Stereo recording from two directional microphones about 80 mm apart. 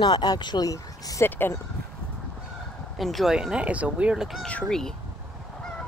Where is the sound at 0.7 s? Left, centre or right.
Left.